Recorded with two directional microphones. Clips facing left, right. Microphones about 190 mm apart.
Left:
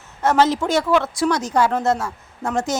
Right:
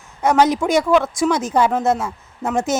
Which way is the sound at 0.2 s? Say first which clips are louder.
Right 2 dB; 15° right (ahead or behind).